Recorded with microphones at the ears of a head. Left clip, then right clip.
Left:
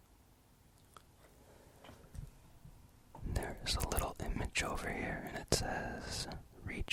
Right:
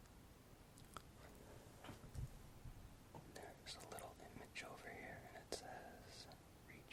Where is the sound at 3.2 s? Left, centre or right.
Left.